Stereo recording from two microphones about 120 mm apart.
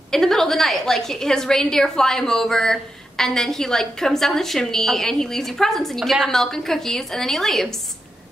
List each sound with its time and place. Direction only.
0.1 s a woman's voice: centre (ahead or behind)